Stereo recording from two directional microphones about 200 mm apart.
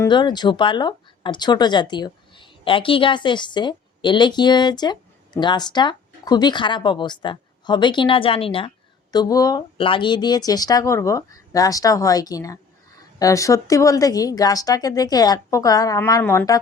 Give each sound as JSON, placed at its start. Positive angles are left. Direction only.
{"t": 0.0, "sound": "a woman's voice", "side_deg": 20}